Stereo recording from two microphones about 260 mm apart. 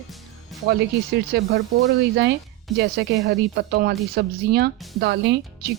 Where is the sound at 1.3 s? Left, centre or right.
Right.